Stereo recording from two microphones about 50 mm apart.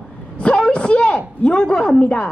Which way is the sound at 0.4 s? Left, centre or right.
Left.